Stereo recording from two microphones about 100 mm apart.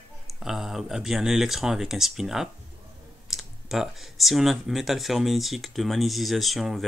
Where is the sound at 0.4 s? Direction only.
5° right (ahead or behind).